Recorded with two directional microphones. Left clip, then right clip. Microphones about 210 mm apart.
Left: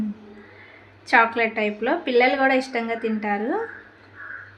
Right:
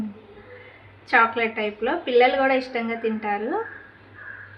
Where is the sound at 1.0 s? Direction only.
30° left (ahead or behind).